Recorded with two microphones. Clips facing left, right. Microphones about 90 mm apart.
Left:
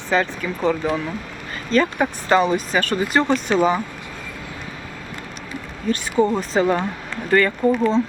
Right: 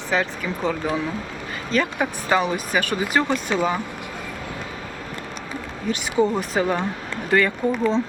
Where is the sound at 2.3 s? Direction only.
5° right (ahead or behind).